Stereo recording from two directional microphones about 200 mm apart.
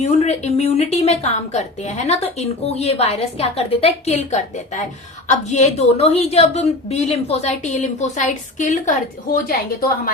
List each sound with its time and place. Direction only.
0.0 s a woman's voice: 35° left (ahead or behind)